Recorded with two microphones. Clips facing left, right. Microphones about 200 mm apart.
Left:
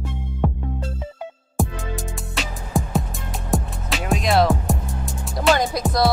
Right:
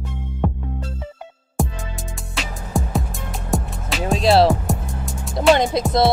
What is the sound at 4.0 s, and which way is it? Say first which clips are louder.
Music: right 4 dB; 30° right (ahead or behind).